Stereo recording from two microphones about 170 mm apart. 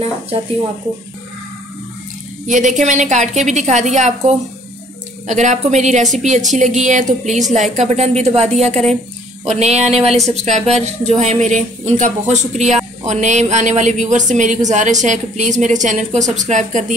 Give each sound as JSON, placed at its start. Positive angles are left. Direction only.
{"t": 2.4, "sound": "speech", "side_deg": -45}
{"t": 5.2, "sound": "a woman's voice", "side_deg": -45}